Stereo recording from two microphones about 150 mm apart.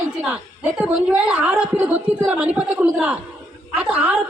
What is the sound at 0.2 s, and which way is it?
A woman's voice, 10° right (ahead or behind).